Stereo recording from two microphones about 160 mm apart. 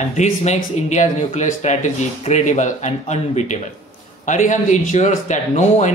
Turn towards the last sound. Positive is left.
turn(degrees=50)  # may be behind; listen again after turning